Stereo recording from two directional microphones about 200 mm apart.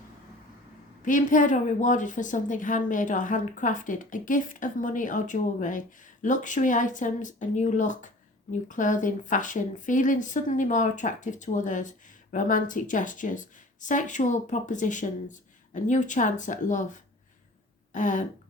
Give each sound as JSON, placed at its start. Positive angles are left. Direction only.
{"t": 1.0, "sound": "speech", "side_deg": 40}